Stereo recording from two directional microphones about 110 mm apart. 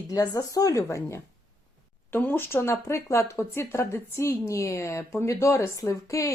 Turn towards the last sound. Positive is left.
turn(degrees=30)  # may be behind; listen again after turning